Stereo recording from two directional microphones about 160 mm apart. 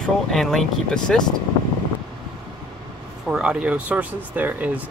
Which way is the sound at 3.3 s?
5° right (ahead or behind).